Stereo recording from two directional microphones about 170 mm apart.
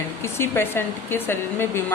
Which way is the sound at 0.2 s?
15° left (ahead or behind).